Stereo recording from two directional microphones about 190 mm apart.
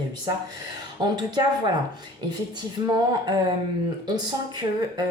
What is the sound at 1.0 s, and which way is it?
Speech, 20° right (ahead or behind).